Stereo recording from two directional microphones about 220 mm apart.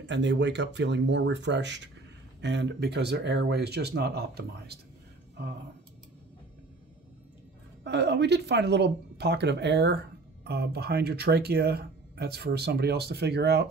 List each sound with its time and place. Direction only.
0.0 s speech: 55° right (ahead or behind)
7.8 s speech: 50° right (ahead or behind)